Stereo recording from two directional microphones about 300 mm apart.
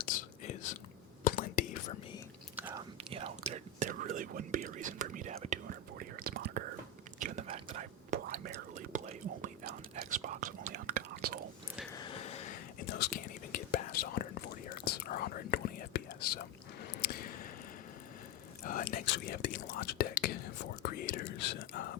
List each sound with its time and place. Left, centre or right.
0.0 s whispering: left
2.6 s whispering: centre
11.9 s a sound: centre
13.0 s whispering: left
17.0 s squish: left
18.6 s whispering: left